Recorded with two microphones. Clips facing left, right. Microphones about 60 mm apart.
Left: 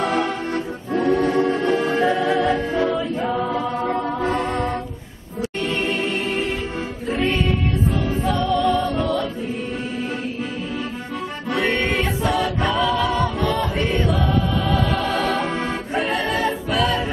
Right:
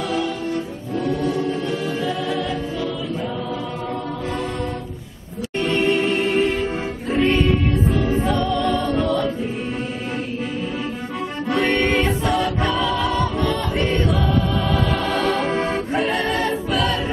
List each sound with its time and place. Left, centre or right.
0.0 s music: left
3.9 s music: left
5.6 s music: centre
11.5 s music: centre